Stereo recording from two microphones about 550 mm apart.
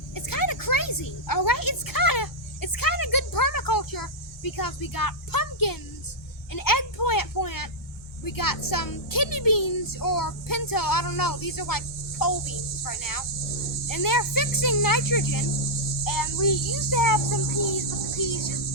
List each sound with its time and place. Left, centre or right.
0.1 s a sound: left
6.5 s a woman's voice: left
12.2 s cricket: left
13.8 s a woman's voice: left